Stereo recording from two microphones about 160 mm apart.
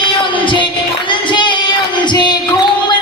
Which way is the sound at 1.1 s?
30° left (ahead or behind).